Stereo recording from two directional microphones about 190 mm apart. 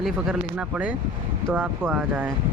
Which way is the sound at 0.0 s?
5° right (ahead or behind).